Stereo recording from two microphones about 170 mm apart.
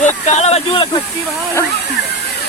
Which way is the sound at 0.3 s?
40° left (ahead or behind).